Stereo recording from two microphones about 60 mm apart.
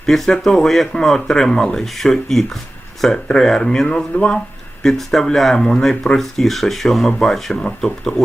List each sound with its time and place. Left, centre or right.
0.0 s speech: centre
4.8 s speech: centre